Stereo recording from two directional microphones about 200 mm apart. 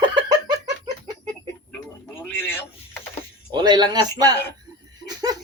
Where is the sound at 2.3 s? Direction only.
10° left (ahead or behind).